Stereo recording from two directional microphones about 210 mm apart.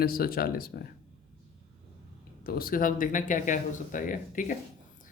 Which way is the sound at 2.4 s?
45° left (ahead or behind).